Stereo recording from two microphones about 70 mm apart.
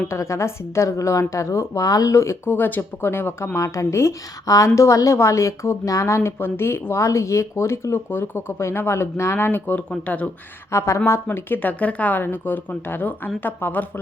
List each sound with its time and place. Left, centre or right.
0.1 s a woman's voice: left
2.1 s speech: left
10.7 s a woman's voice: left
11.3 s speech: left